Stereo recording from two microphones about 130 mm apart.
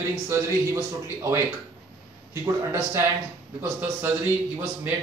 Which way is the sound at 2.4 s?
20° right (ahead or behind).